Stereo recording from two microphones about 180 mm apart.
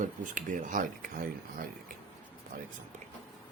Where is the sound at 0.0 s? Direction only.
45° right (ahead or behind).